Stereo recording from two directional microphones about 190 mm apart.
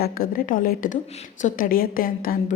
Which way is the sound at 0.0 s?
50° left (ahead or behind).